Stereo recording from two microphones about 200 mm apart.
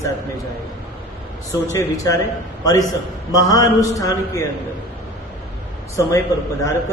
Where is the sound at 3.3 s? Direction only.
20° left (ahead or behind).